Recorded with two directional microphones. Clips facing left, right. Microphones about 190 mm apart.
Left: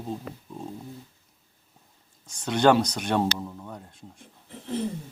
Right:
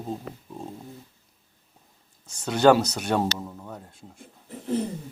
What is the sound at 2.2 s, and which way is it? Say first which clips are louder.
Speech: right 2 dB; 5° right (ahead or behind).